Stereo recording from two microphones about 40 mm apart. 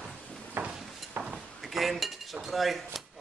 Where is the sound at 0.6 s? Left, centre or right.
Right.